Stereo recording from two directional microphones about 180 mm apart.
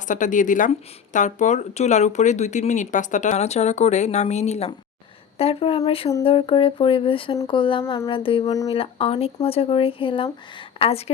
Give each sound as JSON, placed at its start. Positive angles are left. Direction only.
{"t": 0.1, "sound": "speech", "side_deg": 45}